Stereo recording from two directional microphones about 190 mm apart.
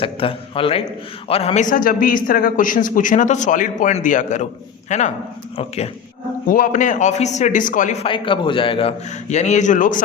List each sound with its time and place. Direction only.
0.0 s a man's voice: 30° left (ahead or behind)
6.5 s a man's voice: 45° left (ahead or behind)
8.0 s a man's voice: 25° left (ahead or behind); by 10.0 s 45° left (ahead or behind)